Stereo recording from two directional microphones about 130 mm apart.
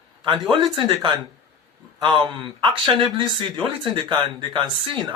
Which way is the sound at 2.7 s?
35° right (ahead or behind).